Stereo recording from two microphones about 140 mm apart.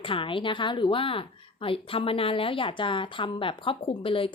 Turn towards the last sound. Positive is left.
turn(degrees=40)  # may be behind; listen again after turning